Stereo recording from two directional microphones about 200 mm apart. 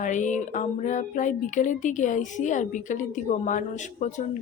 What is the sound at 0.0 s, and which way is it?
A woman's voice, 40° left (ahead or behind).